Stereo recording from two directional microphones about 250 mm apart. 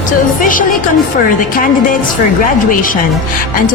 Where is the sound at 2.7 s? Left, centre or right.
Left.